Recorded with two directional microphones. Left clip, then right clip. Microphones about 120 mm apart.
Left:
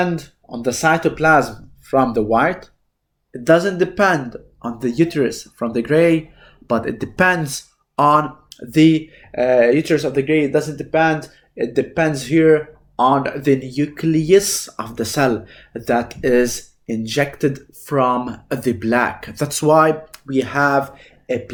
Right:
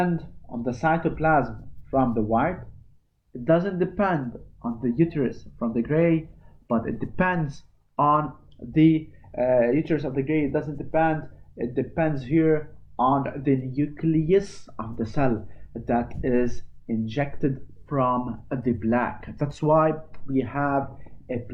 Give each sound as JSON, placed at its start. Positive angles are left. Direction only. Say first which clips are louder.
{"t": 0.0, "sound": "speech", "louder": "left 6 dB", "side_deg": 35}